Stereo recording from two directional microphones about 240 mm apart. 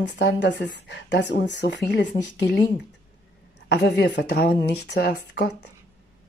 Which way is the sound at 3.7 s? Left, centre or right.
Left.